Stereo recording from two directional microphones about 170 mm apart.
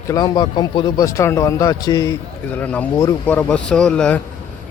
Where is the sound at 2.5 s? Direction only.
10° left (ahead or behind).